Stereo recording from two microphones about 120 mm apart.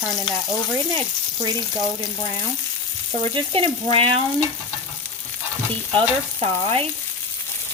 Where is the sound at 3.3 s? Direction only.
50° right (ahead or behind).